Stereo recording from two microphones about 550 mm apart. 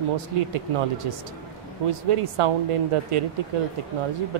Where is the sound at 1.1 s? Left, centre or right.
Right.